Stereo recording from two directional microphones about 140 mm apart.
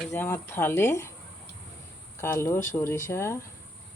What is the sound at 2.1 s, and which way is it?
Speech, 15° left (ahead or behind).